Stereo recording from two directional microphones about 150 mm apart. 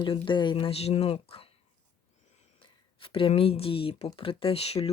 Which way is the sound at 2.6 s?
35° left (ahead or behind).